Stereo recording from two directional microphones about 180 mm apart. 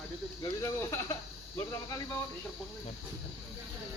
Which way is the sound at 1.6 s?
15° left (ahead or behind).